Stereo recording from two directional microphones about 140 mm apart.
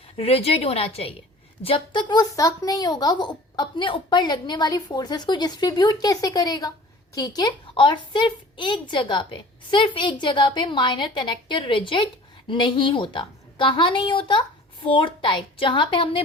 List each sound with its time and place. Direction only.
0.2 s a woman's voice: 45° left (ahead or behind)